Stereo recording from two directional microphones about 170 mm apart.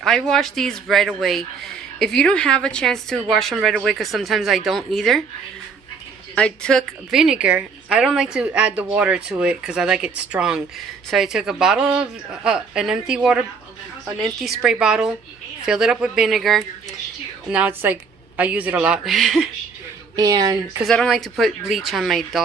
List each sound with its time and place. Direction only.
0.0 s a woman's voice: 5° left (ahead or behind)
6.3 s a woman's voice: 5° left (ahead or behind)
20.1 s speech: 25° right (ahead or behind)
20.8 s a woman's voice: centre (ahead or behind)